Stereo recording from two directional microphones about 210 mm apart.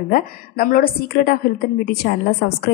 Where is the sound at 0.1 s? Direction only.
45° left (ahead or behind).